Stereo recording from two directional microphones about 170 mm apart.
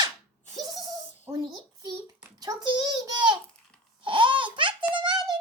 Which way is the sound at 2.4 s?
25° right (ahead or behind).